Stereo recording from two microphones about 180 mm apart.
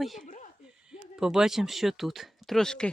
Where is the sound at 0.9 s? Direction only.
5° right (ahead or behind).